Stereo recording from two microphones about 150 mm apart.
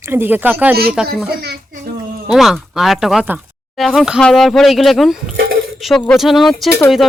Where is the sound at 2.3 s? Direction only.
Centre (ahead or behind).